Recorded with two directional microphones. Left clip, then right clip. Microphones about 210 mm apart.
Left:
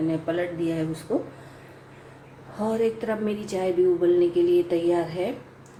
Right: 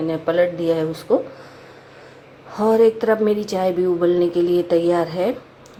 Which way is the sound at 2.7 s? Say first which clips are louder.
Right 11 dB; 20° right (ahead or behind).